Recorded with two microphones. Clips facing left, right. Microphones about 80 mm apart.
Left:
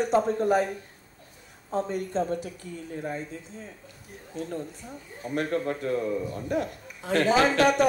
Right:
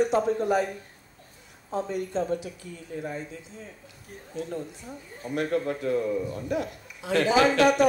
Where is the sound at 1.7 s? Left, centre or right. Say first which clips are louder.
Left 1 dB; left.